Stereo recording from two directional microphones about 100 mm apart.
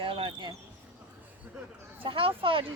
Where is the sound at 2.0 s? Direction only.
60° right (ahead or behind).